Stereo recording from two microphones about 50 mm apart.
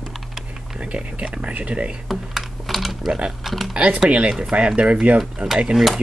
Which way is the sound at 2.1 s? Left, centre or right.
Centre.